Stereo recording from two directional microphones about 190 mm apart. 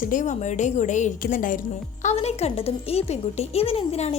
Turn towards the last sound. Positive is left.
turn(degrees=35)  # may be behind; listen again after turning